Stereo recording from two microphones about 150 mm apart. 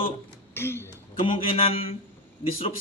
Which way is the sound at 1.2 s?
40° left (ahead or behind).